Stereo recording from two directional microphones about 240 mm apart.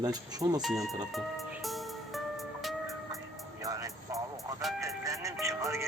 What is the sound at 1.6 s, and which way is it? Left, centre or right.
Music, centre.